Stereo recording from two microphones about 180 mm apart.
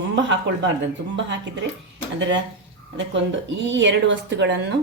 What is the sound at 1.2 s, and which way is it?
Speech, 85° right.